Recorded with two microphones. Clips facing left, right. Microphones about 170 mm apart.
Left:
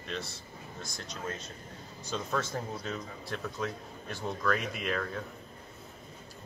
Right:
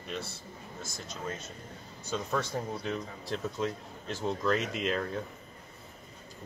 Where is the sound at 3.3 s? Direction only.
20° right (ahead or behind).